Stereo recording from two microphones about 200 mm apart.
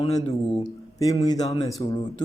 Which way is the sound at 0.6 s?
20° left (ahead or behind).